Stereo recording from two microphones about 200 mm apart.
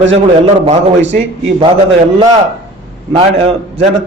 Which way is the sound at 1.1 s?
30° right (ahead or behind).